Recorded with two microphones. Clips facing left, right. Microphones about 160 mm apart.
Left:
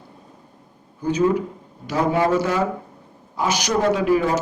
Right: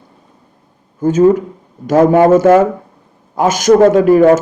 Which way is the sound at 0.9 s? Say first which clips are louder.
Right 9 dB; 45° right (ahead or behind).